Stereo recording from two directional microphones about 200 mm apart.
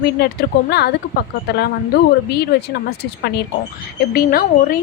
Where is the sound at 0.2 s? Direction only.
55° left (ahead or behind).